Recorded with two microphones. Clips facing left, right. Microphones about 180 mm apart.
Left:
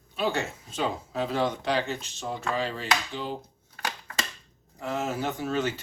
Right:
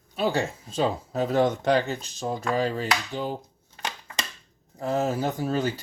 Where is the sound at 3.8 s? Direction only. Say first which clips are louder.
Even; 20° right (ahead or behind).